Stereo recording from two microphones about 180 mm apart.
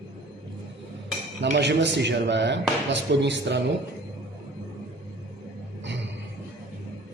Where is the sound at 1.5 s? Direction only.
75° right (ahead or behind).